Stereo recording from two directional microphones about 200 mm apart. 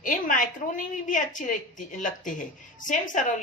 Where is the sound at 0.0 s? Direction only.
40° left (ahead or behind).